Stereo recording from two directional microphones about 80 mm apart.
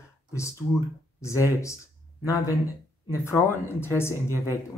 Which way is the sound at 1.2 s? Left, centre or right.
Left.